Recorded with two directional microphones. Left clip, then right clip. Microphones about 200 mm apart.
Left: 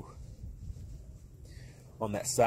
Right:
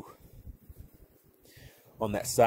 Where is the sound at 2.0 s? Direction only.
20° right (ahead or behind).